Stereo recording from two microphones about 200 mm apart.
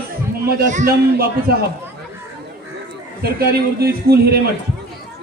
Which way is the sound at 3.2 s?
50° right (ahead or behind).